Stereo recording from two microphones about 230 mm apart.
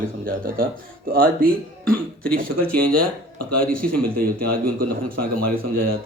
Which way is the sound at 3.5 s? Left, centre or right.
Right.